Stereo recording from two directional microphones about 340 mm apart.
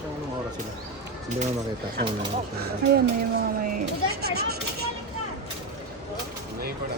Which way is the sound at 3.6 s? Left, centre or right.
Right.